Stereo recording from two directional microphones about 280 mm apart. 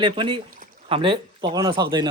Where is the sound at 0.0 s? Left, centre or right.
Centre.